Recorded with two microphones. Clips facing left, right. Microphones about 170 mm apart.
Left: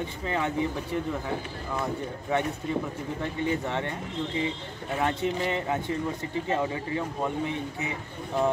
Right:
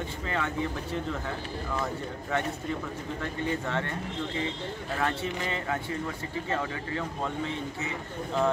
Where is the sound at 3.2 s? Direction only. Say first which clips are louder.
Left 3 dB; 20° left (ahead or behind).